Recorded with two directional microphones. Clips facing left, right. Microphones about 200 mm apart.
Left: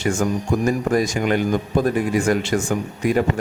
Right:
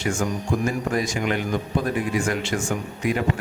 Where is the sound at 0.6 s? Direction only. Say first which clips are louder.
Left 7 dB; 40° left (ahead or behind).